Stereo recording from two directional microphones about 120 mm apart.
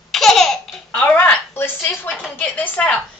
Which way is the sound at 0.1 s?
Centre (ahead or behind).